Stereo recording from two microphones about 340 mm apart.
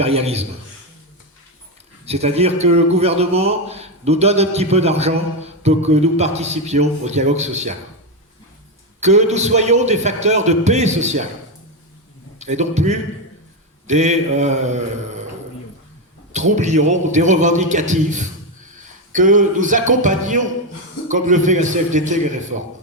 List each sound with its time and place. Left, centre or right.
0.0 s a man's voice: centre
2.0 s a man's voice: centre
9.0 s a man's voice: centre
12.4 s a man's voice: centre
16.3 s a man's voice: right